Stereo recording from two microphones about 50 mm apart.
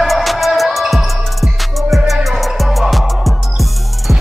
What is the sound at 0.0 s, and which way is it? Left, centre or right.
Music, centre.